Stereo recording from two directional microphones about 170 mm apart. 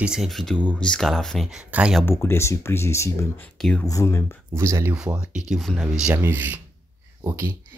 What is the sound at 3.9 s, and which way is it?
Speech, 20° left (ahead or behind).